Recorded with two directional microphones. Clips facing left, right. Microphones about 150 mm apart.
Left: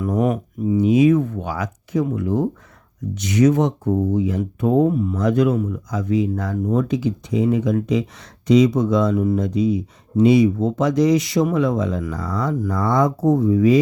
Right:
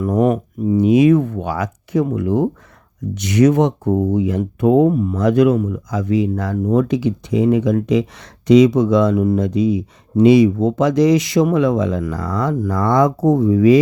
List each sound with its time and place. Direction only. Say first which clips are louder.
0.0 s speech: right 4 dB; 50° right (ahead or behind)
0.9 s speech: right 3 dB; 70° right (ahead or behind)
4.9 s speech: right 3 dB; 50° right (ahead or behind)
5.2 s speech: right 5 dB; 80° right
8.4 s speech: right 4 dB; 90° right